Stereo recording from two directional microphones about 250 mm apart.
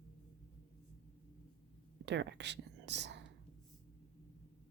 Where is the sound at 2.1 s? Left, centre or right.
Right.